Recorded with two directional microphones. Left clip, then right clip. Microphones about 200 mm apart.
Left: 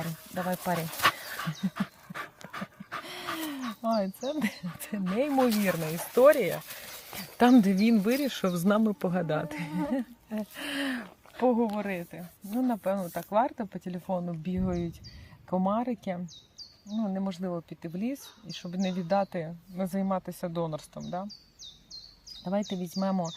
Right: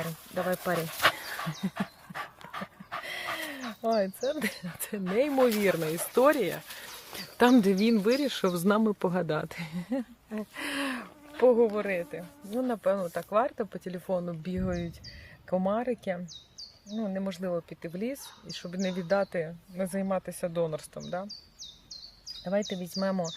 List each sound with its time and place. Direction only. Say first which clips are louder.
0.0 s a sound: right 2 dB; centre (ahead or behind)
0.4 s speech: right 1 dB; 15° right (ahead or behind)
1.4 s dog: even; centre (ahead or behind)
3.0 s dog: right 3 dB; 15° right (ahead or behind)
3.3 s a sound: even; 10° right (ahead or behind)
3.8 s speech: right 2 dB; 15° right (ahead or behind)
5.6 s speech: right 3 dB; 20° right (ahead or behind)
6.0 s speech: left 5 dB; 10° right (ahead or behind)
22.4 s speech: right 2 dB; 15° right (ahead or behind)